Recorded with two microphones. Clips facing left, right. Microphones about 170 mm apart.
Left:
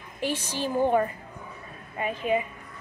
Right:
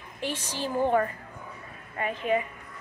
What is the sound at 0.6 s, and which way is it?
A woman's voice, 15° left (ahead or behind).